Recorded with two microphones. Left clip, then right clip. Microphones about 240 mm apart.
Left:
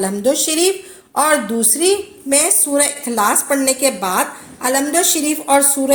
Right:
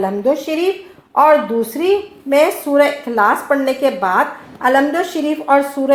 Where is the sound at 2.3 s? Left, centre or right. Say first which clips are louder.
Right 4 dB; left.